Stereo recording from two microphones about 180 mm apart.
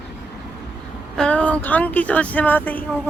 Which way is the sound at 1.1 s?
5° left (ahead or behind).